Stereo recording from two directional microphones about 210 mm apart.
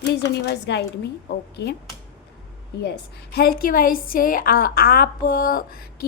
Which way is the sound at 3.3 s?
45° left (ahead or behind).